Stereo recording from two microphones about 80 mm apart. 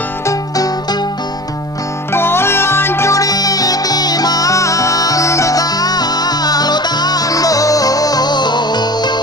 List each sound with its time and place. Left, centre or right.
0.3 s music: left
2.1 s music: left